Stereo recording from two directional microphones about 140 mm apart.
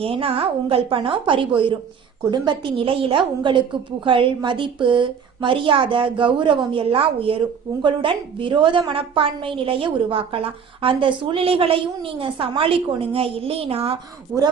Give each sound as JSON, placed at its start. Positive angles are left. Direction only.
{"t": 0.0, "sound": "speech", "side_deg": -45}
{"t": 14.3, "sound": "speech", "side_deg": -20}